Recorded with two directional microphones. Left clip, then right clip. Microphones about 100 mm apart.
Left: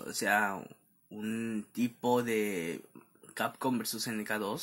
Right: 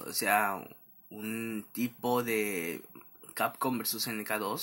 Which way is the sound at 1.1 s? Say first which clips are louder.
Even; 45° left (ahead or behind).